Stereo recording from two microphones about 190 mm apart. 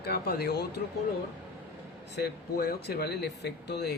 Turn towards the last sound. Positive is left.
turn(degrees=65)  # may be behind; listen again after turning